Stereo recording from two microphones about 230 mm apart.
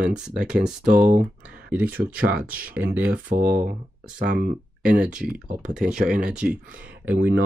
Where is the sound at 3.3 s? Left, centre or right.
Right.